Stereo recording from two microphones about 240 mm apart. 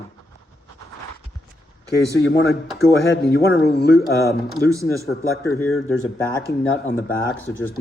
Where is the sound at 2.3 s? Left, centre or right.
Left.